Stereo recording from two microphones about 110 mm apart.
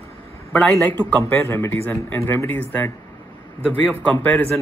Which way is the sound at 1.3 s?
20° left (ahead or behind).